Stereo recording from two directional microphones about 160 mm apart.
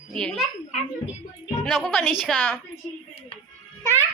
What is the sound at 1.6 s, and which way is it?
Speech, centre (ahead or behind).